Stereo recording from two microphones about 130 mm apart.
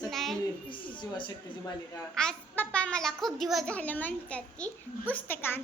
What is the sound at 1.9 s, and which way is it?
A child's voice, 5° left (ahead or behind).